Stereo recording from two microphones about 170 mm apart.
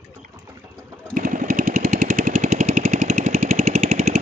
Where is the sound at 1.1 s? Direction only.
50° right (ahead or behind).